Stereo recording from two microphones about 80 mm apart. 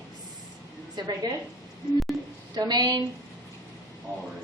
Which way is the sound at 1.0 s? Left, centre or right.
Right.